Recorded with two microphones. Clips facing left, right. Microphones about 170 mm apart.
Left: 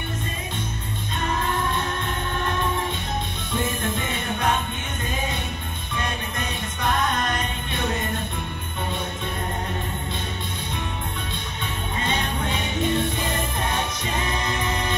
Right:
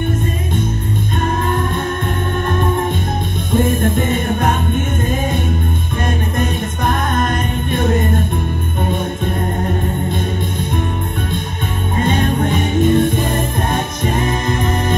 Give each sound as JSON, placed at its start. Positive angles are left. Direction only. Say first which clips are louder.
{"t": 1.2, "sound": "music", "louder": "right 5 dB", "side_deg": -50}
{"t": 3.5, "sound": "music", "louder": "right 11 dB", "side_deg": -50}
{"t": 12.0, "sound": "music", "louder": "right 11 dB", "side_deg": -50}